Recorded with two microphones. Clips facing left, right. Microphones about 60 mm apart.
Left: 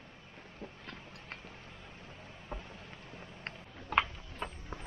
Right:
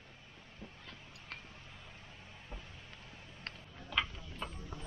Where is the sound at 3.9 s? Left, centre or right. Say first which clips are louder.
Left 6 dB; left.